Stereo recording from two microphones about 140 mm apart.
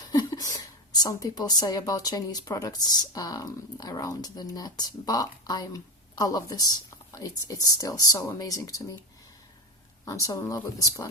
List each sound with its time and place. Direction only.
0.1 s a woman's voice: 25° left (ahead or behind)
10.1 s a woman's voice: 25° left (ahead or behind)